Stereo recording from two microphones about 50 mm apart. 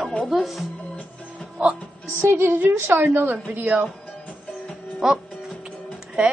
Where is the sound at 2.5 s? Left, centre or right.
Right.